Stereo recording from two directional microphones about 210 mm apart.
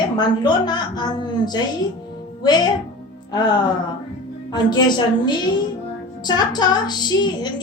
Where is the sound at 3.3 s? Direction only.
20° left (ahead or behind).